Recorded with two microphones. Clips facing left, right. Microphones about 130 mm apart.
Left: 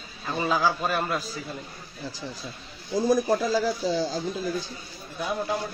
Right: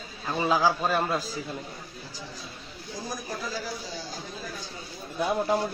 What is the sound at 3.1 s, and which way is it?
Speech, 75° left (ahead or behind).